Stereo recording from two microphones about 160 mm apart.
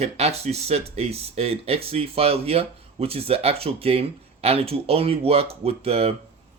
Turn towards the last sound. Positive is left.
turn(degrees=-40)  # may be behind; listen again after turning